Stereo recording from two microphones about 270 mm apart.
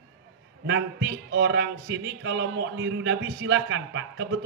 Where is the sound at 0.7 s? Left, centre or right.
Right.